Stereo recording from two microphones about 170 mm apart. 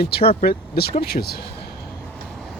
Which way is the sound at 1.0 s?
65° left (ahead or behind).